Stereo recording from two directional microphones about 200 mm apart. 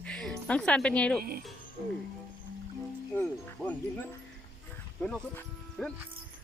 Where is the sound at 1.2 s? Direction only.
45° right (ahead or behind).